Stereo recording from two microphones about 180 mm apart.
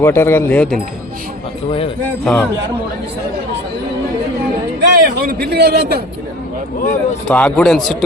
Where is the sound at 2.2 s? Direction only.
5° left (ahead or behind).